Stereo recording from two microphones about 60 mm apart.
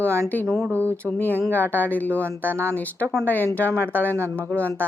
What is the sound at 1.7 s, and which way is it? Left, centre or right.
Speech, left.